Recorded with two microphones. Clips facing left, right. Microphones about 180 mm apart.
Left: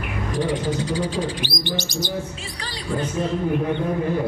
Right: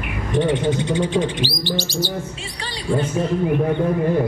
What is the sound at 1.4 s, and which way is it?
Chirp, 15° left (ahead or behind).